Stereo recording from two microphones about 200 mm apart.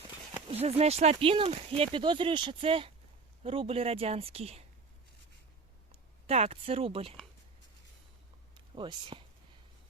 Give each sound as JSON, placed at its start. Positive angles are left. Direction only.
{"t": 0.4, "sound": "speech", "side_deg": -30}
{"t": 5.9, "sound": "speech", "side_deg": -30}
{"t": 8.5, "sound": "speech", "side_deg": -25}